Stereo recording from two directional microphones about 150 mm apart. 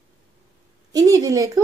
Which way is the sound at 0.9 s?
25° right (ahead or behind).